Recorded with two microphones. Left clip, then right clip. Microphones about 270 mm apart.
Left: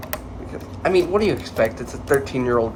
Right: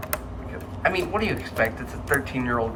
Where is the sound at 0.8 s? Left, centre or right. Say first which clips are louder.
Left 6 dB; centre.